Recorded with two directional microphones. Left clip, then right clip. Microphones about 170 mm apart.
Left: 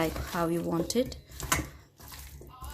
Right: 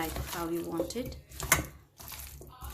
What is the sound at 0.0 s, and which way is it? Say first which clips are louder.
Speech: left 6 dB; 75° left (ahead or behind).